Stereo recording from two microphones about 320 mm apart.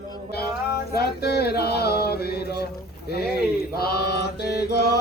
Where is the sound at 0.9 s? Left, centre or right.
Left.